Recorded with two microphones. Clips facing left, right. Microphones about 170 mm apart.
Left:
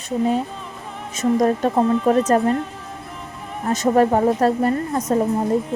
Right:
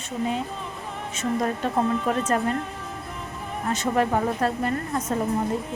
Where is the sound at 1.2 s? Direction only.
40° left (ahead or behind).